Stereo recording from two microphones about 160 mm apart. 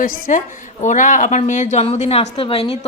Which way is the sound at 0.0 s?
55° left (ahead or behind).